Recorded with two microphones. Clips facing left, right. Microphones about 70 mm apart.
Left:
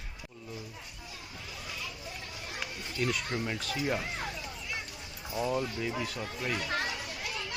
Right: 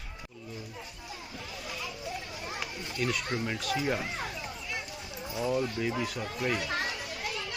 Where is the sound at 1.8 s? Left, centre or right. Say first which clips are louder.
Right 4 dB; centre.